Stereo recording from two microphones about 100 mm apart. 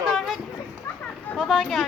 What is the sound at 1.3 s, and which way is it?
Speech, centre (ahead or behind).